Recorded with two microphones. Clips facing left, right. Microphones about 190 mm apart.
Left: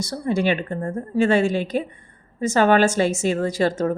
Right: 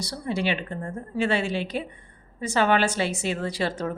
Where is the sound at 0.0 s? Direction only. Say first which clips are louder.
Left 6 dB; 45° left (ahead or behind).